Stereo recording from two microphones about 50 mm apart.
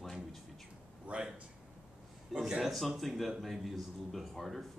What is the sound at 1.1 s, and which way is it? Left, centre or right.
Speech, right.